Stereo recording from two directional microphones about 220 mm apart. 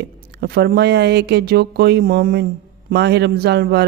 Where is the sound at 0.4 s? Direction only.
45° right (ahead or behind).